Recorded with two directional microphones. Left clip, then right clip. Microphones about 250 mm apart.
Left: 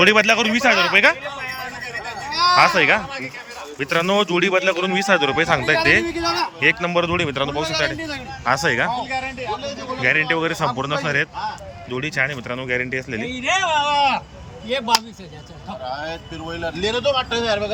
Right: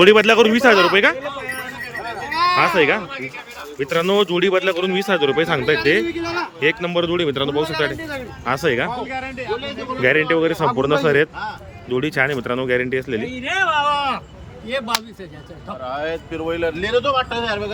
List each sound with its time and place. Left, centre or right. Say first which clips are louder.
0.0 s speech: right 3 dB; centre
2.3 s speech: left 1 dB; centre
6.1 s a man's voice: left 2 dB; left
6.8 s speech: even; centre
10.0 s speech: right 2 dB; centre
13.3 s speech: even; centre
15.8 s speech: right 4 dB; centre